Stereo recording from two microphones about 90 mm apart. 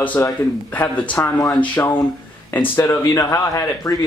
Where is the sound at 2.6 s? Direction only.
30° left (ahead or behind).